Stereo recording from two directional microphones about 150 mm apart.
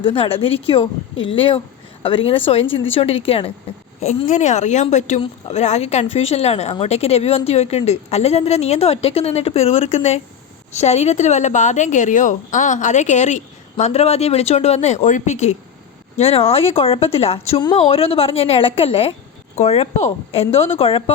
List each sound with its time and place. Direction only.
0.0 s a woman's voice: 40° left (ahead or behind)